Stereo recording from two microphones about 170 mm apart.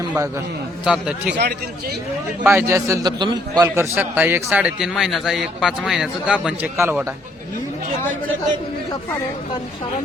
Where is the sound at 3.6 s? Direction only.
10° right (ahead or behind).